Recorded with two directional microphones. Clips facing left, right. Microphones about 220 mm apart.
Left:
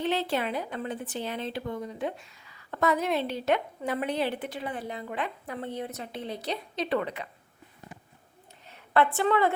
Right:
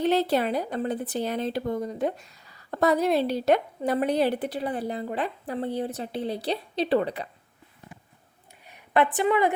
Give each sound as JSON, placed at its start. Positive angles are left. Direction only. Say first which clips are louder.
{"t": 0.0, "sound": "speech", "louder": "right 5 dB", "side_deg": -40}
{"t": 8.6, "sound": "a woman's voice", "louder": "right 1 dB", "side_deg": -15}